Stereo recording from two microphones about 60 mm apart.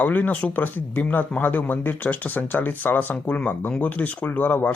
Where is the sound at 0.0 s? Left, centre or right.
Left.